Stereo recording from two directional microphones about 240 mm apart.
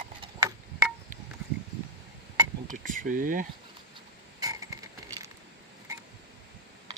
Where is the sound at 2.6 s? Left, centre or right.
Right.